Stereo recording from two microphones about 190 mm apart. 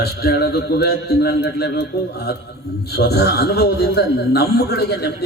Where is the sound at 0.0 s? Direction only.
55° left (ahead or behind).